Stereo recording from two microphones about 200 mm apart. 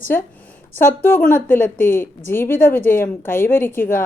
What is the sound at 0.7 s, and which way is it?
A woman's voice, 10° left (ahead or behind).